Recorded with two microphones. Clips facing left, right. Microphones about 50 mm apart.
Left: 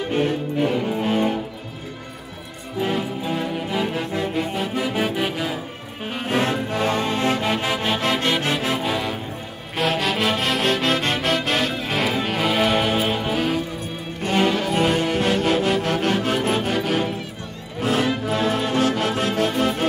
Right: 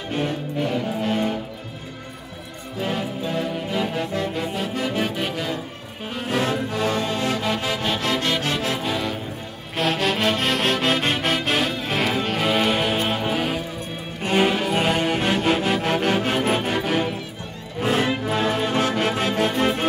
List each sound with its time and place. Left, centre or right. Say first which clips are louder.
0.1 s music: left 2 dB; centre
2.8 s music: left 2 dB; centre
6.2 s music: left 1 dB; left
8.8 s music: left 1 dB; centre; by 19.9 s right